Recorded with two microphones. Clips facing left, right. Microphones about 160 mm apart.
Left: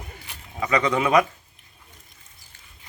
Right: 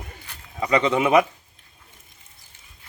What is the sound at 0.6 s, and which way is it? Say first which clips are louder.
Speech: right 2 dB; 25° right (ahead or behind).